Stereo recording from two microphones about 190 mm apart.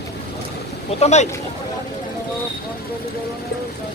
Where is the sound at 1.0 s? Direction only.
35° left (ahead or behind).